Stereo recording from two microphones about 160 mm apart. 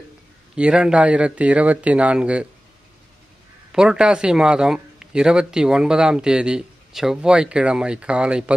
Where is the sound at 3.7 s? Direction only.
5° right (ahead or behind).